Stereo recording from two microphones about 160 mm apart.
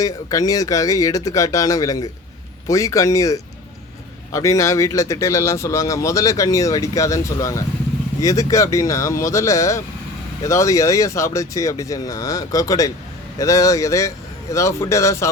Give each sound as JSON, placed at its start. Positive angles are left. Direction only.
{"t": 0.0, "sound": "speech", "side_deg": 20}